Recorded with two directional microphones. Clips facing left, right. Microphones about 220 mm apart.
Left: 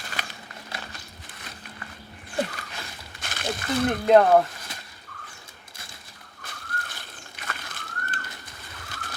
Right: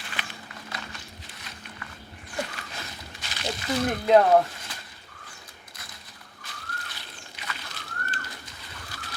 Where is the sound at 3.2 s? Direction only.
50° left (ahead or behind).